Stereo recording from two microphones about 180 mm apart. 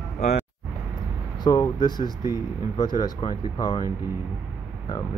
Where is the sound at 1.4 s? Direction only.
20° left (ahead or behind).